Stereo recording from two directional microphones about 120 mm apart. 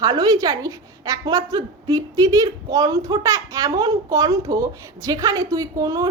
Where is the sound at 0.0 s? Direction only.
35° right (ahead or behind).